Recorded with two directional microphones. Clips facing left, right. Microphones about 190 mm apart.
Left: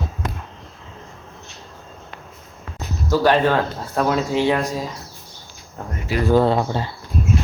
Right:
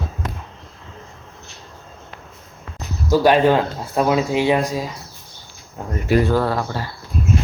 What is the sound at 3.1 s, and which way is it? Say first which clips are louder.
Speech: right 3 dB; 15° right (ahead or behind).